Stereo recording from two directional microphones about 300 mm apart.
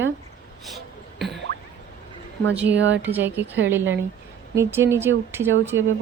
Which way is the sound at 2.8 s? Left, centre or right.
Right.